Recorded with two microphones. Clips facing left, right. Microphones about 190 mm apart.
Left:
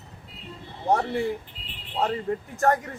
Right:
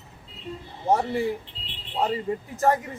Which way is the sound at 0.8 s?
Centre (ahead or behind).